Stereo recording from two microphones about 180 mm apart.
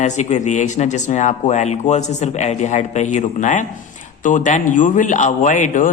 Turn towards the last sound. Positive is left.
turn(degrees=45)  # may be behind; listen again after turning